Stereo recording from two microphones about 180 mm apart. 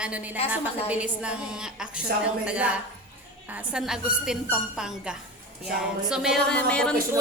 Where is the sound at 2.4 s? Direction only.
5° right (ahead or behind).